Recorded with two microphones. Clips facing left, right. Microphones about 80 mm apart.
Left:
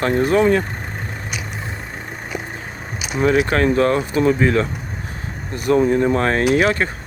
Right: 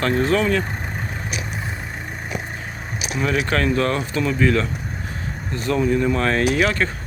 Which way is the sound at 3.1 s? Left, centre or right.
Left.